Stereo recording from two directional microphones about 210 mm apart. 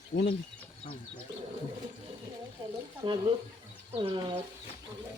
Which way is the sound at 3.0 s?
25° right (ahead or behind).